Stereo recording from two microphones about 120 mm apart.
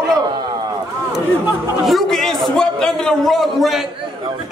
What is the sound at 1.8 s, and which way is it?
A man's voice, centre (ahead or behind).